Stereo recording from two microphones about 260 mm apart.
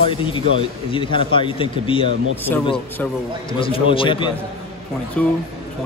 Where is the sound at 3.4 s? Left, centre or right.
Centre.